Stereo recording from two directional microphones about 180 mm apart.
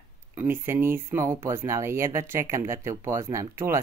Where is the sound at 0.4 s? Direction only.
10° right (ahead or behind).